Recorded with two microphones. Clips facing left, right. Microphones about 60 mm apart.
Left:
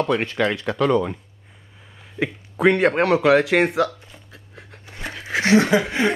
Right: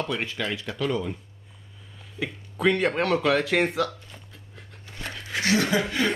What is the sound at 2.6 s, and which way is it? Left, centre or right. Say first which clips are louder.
Speech: left 6 dB; left.